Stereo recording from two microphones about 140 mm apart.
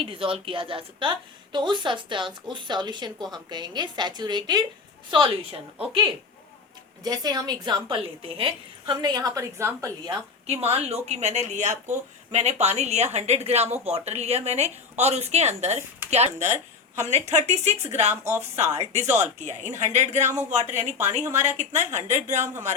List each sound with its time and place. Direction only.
0.0 s speech: 40° right (ahead or behind)
7.0 s a woman's voice: 30° right (ahead or behind)
10.4 s speech: 50° right (ahead or behind)
18.1 s speech: 20° right (ahead or behind)
18.5 s a woman's voice: 50° right (ahead or behind)